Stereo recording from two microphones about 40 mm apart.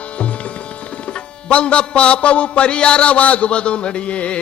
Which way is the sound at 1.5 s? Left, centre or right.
Left.